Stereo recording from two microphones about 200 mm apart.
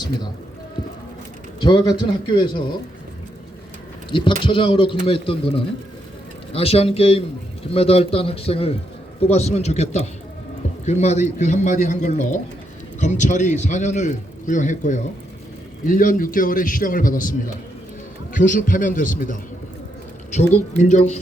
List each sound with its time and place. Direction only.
1.6 s speech: 20° left (ahead or behind)
4.1 s a man's voice: 25° left (ahead or behind); by 17.3 s 45° left (ahead or behind)
18.3 s a man's voice: 40° left (ahead or behind)